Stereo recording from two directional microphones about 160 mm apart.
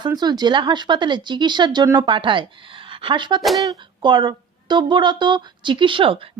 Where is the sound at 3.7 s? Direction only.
30° right (ahead or behind).